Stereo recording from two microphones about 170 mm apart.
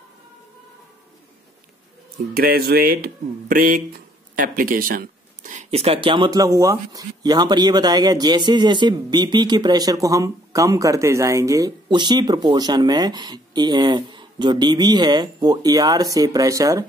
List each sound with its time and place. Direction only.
2.3 s speech: 65° right (ahead or behind); by 16.8 s 20° right (ahead or behind)